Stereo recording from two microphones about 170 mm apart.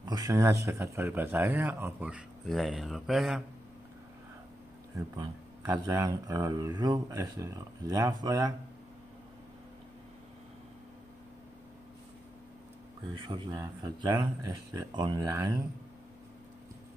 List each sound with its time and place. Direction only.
0.0 s speech: 20° right (ahead or behind); by 3.4 s centre (ahead or behind)
5.1 s speech: 20° right (ahead or behind)
13.1 s speech: 30° right (ahead or behind)